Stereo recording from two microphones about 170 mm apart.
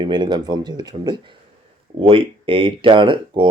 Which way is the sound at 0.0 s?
25° right (ahead or behind).